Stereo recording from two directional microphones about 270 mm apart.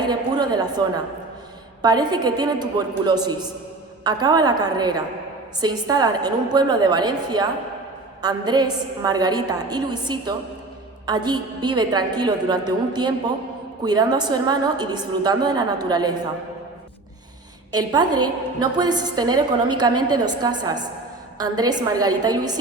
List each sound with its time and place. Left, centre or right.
0.0 s a woman's voice: centre
1.8 s a woman's voice: centre
17.7 s a woman's voice: centre